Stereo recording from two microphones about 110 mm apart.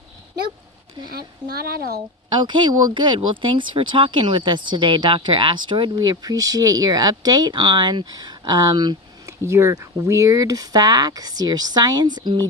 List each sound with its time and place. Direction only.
2.3 s speech: 45° right (ahead or behind)
6.0 s speech: 35° right (ahead or behind)
9.2 s speech: 25° right (ahead or behind); by 12.4 s 40° right (ahead or behind)